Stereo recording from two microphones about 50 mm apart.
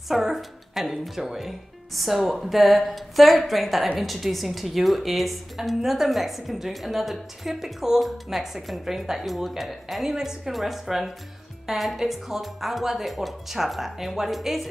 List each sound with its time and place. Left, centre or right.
0.1 s a woman's voice: centre